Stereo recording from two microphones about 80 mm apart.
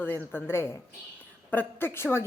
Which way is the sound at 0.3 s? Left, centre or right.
Left.